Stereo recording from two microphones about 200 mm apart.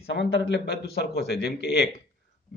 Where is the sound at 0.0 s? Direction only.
55° left (ahead or behind).